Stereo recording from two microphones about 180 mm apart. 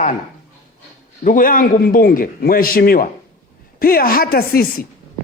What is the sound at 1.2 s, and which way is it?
A man's voice, 50° left (ahead or behind).